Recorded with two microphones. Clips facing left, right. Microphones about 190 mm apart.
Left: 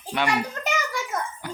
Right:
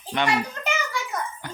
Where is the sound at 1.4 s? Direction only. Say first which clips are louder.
Left 3 dB; 10° left (ahead or behind).